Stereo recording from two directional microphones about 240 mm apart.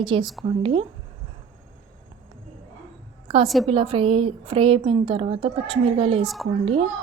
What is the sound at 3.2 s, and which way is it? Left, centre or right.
A woman's voice, right.